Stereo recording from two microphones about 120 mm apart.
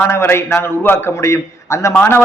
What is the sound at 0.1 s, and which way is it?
A man's voice, 20° left (ahead or behind).